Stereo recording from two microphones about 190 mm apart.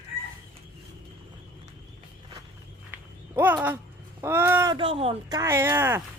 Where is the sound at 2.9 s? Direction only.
10° right (ahead or behind).